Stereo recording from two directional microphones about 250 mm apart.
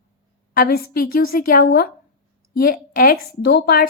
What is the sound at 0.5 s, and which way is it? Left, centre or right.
Speech, left.